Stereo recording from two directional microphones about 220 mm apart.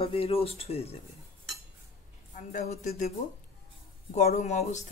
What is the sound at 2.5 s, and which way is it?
Speech, 30° left (ahead or behind).